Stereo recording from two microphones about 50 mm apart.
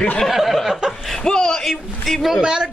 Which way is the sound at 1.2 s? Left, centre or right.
Centre.